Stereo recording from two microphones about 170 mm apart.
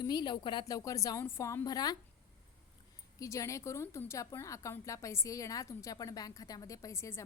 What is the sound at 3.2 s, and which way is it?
A woman's voice, 20° left (ahead or behind).